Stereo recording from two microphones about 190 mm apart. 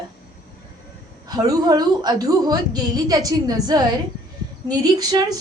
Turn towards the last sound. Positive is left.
turn(degrees=-20)  # may be behind; listen again after turning